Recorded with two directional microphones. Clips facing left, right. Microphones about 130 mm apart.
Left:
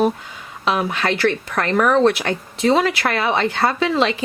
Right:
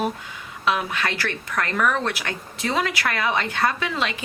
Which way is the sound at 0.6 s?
30° left (ahead or behind).